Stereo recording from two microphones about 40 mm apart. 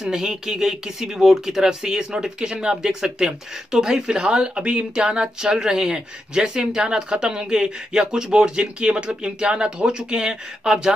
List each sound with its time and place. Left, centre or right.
0.0 s speech: centre